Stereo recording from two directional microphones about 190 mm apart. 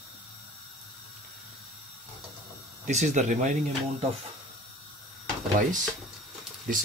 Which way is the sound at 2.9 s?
35° right (ahead or behind).